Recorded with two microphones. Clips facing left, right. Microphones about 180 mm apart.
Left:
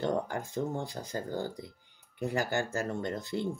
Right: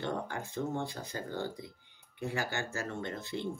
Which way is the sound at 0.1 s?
40° left (ahead or behind).